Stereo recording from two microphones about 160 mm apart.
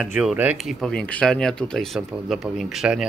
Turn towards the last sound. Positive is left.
turn(degrees=-5)  # may be behind; listen again after turning